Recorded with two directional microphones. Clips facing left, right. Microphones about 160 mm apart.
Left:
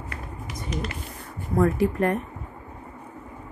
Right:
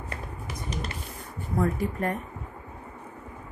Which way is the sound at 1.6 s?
75° left (ahead or behind).